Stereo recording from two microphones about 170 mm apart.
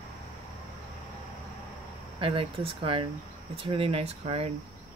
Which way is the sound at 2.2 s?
30° right (ahead or behind).